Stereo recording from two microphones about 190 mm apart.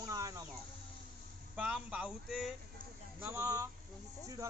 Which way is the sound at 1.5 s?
5° right (ahead or behind).